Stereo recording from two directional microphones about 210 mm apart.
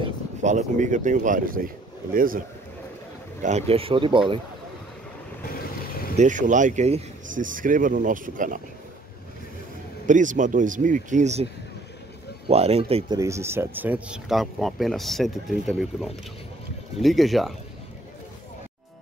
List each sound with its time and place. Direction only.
0.0 s speech: 35° right (ahead or behind)
3.4 s speech: 30° right (ahead or behind)
5.5 s boat: 45° left (ahead or behind)
6.1 s speech: 35° right (ahead or behind)
10.0 s speech: 35° right (ahead or behind)
12.4 s speech: 30° right (ahead or behind)
13.2 s speech: 15° right (ahead or behind)